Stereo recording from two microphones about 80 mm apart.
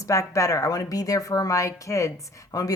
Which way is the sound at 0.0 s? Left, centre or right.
Left.